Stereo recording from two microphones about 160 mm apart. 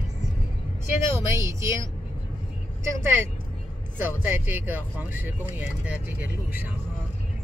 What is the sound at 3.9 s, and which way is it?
Speech, 10° right (ahead or behind).